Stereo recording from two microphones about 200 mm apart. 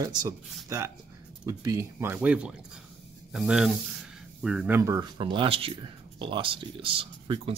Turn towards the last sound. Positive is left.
turn(degrees=-25)  # may be behind; listen again after turning